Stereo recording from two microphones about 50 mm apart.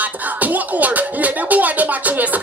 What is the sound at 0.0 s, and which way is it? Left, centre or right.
Music, right.